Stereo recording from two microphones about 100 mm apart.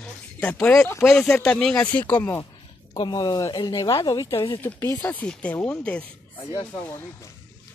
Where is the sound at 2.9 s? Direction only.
45° left (ahead or behind).